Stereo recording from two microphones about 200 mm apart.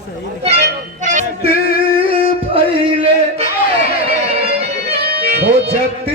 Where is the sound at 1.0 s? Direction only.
35° right (ahead or behind).